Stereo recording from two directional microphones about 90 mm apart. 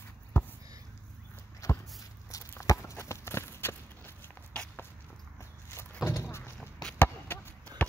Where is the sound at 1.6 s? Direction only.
40° left (ahead or behind).